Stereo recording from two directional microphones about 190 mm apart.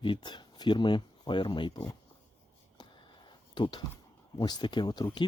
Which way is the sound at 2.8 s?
25° left (ahead or behind).